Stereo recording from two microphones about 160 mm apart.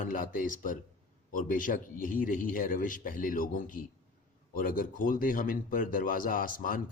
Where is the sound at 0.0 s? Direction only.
55° left (ahead or behind).